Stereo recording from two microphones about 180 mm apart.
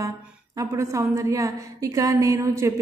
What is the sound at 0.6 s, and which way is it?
A woman's voice, 15° right (ahead or behind).